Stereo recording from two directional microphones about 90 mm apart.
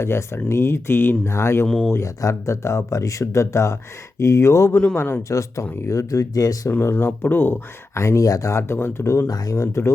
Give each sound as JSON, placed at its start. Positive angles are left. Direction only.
{"t": 0.0, "sound": "speech", "side_deg": 30}
{"t": 5.3, "sound": "speech", "side_deg": 35}
{"t": 5.6, "sound": "speech", "side_deg": 20}
{"t": 5.9, "sound": "speech", "side_deg": 35}
{"t": 6.7, "sound": "speech", "side_deg": 20}